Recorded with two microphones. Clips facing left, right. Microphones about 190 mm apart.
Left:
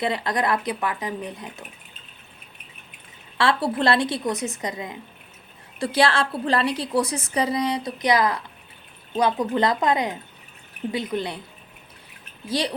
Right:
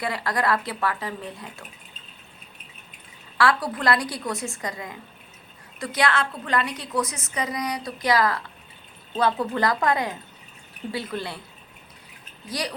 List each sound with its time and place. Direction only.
0.0 s a woman's voice: 20° left (ahead or behind)
3.3 s a woman's voice: 25° left (ahead or behind)
12.5 s a woman's voice: 25° left (ahead or behind)